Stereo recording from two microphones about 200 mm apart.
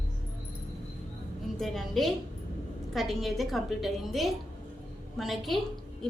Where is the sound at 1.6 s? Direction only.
Centre (ahead or behind).